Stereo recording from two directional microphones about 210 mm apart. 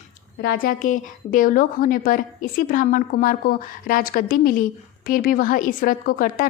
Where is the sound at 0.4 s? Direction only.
40° left (ahead or behind).